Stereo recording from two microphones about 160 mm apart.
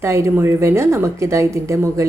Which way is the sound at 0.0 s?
15° right (ahead or behind).